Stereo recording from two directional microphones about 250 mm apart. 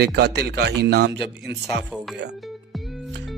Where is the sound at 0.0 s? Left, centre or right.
Right.